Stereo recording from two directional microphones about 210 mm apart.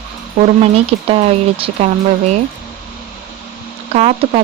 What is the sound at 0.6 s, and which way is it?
Speech, 30° right (ahead or behind).